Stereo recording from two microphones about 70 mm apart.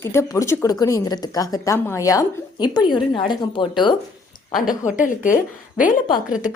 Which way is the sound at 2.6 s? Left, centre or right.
Left.